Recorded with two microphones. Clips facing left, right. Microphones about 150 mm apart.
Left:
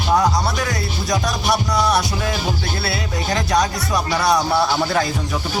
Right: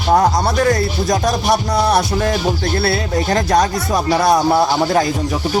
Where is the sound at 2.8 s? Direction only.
50° right (ahead or behind).